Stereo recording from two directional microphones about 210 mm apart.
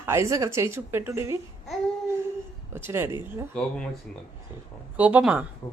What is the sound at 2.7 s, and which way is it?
Speech, 10° right (ahead or behind).